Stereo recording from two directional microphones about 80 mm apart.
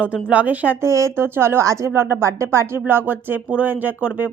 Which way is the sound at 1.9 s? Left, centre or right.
Right.